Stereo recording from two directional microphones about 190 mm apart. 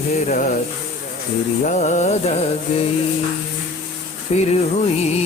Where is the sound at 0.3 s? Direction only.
45° left (ahead or behind).